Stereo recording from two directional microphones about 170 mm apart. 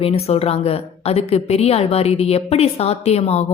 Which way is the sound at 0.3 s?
35° left (ahead or behind).